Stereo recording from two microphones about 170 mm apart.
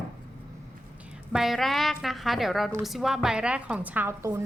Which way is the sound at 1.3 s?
Centre (ahead or behind).